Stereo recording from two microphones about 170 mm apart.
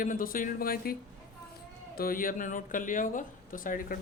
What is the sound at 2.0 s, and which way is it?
Speech, 55° left (ahead or behind).